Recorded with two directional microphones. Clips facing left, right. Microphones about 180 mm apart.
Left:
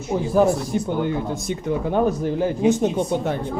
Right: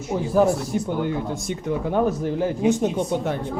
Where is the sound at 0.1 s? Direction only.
20° left (ahead or behind).